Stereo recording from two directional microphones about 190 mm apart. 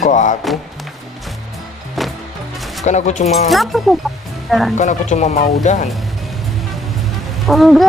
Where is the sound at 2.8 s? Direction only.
40° left (ahead or behind).